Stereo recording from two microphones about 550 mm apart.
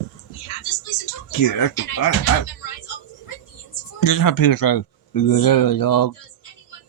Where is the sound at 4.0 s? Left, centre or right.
Left.